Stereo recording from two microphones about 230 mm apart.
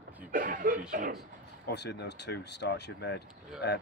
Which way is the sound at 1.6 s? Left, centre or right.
Left.